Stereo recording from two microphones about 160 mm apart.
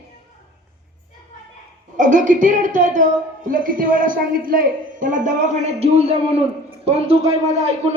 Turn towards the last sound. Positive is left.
turn(degrees=-45)  # may be behind; listen again after turning